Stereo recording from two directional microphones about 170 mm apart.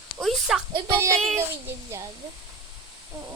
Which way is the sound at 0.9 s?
15° right (ahead or behind).